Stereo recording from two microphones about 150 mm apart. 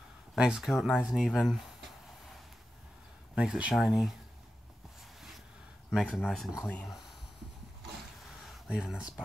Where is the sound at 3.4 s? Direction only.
5° right (ahead or behind).